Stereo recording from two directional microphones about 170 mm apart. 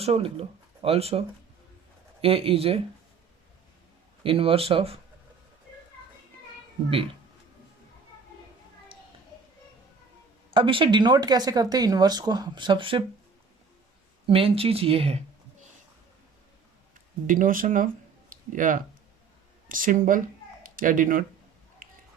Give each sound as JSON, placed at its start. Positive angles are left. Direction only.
{"t": 0.0, "sound": "speech", "side_deg": -35}
{"t": 2.2, "sound": "speech", "side_deg": -35}
{"t": 4.2, "sound": "speech", "side_deg": -30}
{"t": 10.5, "sound": "speech", "side_deg": -30}
{"t": 14.3, "sound": "speech", "side_deg": -35}
{"t": 17.2, "sound": "speech", "side_deg": -50}